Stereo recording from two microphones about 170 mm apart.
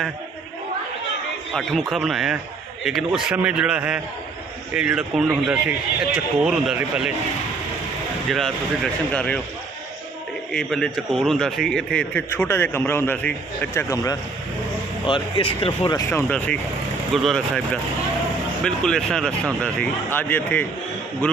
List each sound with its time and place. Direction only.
1.5 s speech: centre (ahead or behind)
8.3 s speech: centre (ahead or behind)
10.5 s a man's voice: 5° left (ahead or behind); by 14.2 s 20° left (ahead or behind)
15.0 s speech: 30° left (ahead or behind); by 17.6 s centre (ahead or behind)
18.6 s speech: 5° left (ahead or behind)